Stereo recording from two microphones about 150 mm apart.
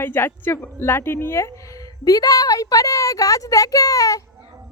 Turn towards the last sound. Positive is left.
turn(degrees=20)  # may be behind; listen again after turning